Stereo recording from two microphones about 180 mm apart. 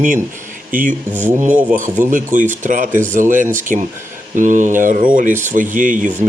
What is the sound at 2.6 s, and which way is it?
Speech, 45° right (ahead or behind).